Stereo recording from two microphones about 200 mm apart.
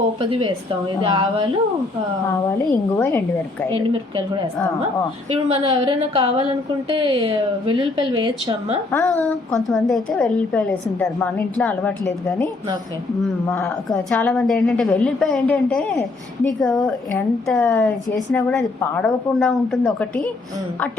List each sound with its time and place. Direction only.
0.2 s a woman's voice: 25° right (ahead or behind)
3.0 s speech: 10° left (ahead or behind)
5.5 s a woman's voice: 30° right (ahead or behind)
8.9 s a woman's voice: 10° left (ahead or behind)
13.5 s a woman's voice: 10° left (ahead or behind)